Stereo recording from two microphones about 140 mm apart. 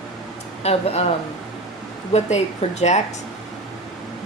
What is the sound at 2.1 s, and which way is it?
Speech, 50° left (ahead or behind).